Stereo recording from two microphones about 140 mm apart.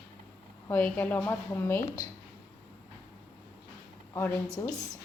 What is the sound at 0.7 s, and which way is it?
A woman's voice, 10° left (ahead or behind).